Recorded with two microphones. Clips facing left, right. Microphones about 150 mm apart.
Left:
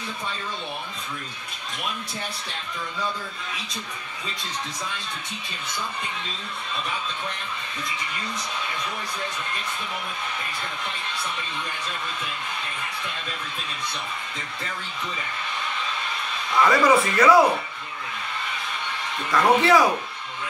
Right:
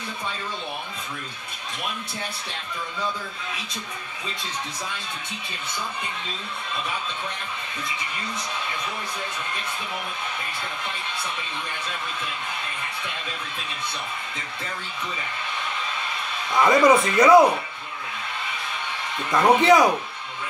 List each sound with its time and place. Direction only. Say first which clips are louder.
16.6 s speech: right 2 dB; 20° right (ahead or behind)
19.3 s speech: right 2 dB; 20° right (ahead or behind)